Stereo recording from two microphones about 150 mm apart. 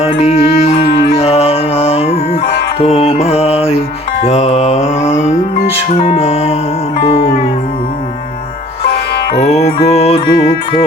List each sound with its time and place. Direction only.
0.0 s music: 45° left (ahead or behind)
5.9 s music: 40° left (ahead or behind)
9.3 s music: 50° left (ahead or behind)